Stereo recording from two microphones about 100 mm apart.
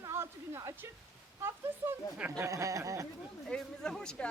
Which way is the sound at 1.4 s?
25° right (ahead or behind).